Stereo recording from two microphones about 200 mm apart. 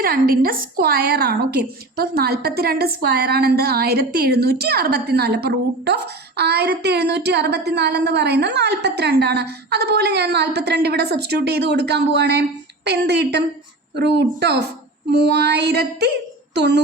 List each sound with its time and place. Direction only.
0.0 s a woman's voice: 45° right (ahead or behind)